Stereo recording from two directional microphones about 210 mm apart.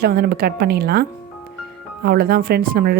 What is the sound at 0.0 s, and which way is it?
A woman's voice, 45° right (ahead or behind).